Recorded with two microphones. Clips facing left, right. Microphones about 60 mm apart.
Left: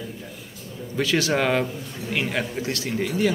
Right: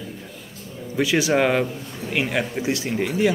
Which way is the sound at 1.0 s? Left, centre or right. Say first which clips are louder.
Right 3 dB; centre.